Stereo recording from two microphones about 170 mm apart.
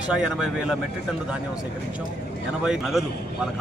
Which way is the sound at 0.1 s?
5° right (ahead or behind).